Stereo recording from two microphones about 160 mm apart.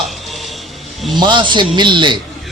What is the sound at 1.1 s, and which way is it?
A man's voice, 30° right (ahead or behind).